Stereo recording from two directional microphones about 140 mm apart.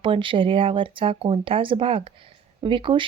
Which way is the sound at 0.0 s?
40° right (ahead or behind).